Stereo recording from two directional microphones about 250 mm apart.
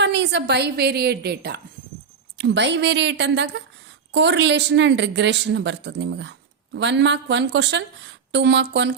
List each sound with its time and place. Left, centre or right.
0.0 s a woman's voice: right